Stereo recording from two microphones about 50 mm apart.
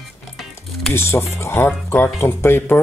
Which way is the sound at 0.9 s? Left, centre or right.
Left.